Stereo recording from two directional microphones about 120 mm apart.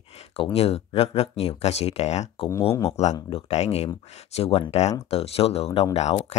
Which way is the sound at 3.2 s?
55° left (ahead or behind).